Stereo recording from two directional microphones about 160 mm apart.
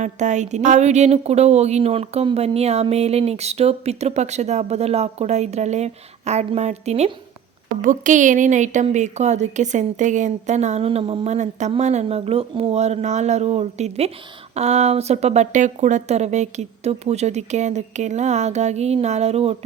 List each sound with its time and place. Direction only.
0.0 s a woman's voice: 50° right (ahead or behind)
7.8 s a woman's voice: 55° right (ahead or behind)